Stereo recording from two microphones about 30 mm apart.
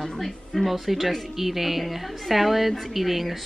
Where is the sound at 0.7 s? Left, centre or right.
Centre.